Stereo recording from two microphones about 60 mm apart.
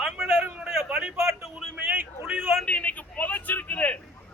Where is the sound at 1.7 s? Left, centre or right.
Right.